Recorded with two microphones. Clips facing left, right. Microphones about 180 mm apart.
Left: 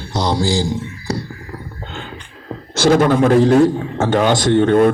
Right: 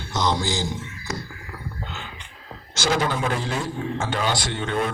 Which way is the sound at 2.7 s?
55° left (ahead or behind).